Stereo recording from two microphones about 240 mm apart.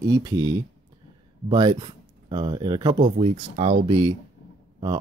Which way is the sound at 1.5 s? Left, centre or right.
Centre.